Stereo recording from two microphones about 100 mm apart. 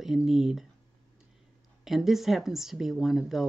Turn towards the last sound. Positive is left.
turn(degrees=0)  # may be behind; listen again after turning